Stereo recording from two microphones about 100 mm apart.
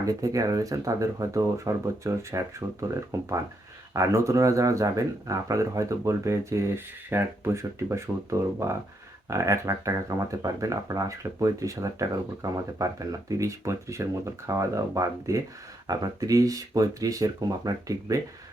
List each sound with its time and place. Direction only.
0.0 s speech: 35° right (ahead or behind)